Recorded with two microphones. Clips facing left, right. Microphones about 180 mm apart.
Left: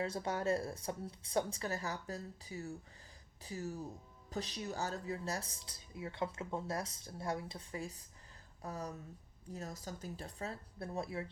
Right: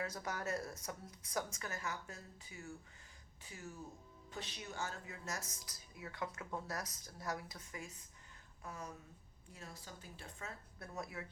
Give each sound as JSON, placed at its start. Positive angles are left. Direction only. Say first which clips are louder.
{"t": 0.0, "sound": "speech", "louder": "left 6 dB", "side_deg": 30}